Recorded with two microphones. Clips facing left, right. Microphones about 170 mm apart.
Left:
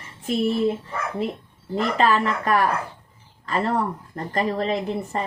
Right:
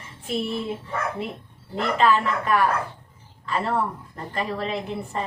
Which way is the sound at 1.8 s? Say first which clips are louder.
Even; 40° left (ahead or behind).